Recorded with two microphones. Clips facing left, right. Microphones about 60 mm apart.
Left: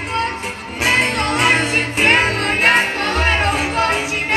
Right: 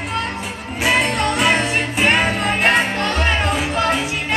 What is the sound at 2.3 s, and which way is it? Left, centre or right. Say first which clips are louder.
Music: left 1 dB; left.